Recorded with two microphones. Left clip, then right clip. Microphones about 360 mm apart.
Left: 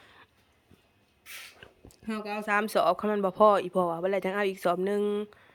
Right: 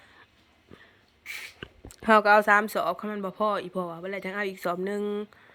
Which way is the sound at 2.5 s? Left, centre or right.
Centre.